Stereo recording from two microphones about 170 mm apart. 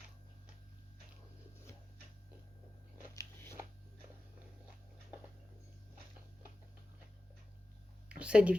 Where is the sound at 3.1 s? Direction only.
15° left (ahead or behind).